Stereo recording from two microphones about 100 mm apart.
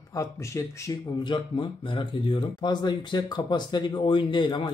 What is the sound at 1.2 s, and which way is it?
A man's voice, 55° left (ahead or behind).